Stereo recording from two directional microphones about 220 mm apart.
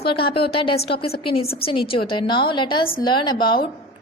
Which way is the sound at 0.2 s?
25° left (ahead or behind).